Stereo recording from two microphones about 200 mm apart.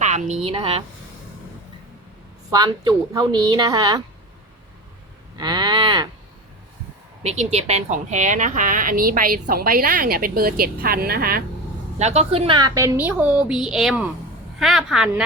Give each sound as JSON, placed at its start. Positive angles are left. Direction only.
{"t": 0.0, "sound": "a woman's voice", "side_deg": -35}
{"t": 2.5, "sound": "a woman's voice", "side_deg": -20}
{"t": 5.4, "sound": "cattle", "side_deg": -20}
{"t": 7.2, "sound": "a woman's voice", "side_deg": -35}
{"t": 11.9, "sound": "a woman's voice", "side_deg": -35}